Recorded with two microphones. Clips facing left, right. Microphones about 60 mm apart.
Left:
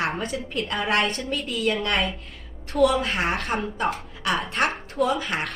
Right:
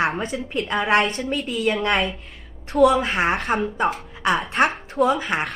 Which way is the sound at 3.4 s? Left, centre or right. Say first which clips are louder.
Right 4 dB; centre.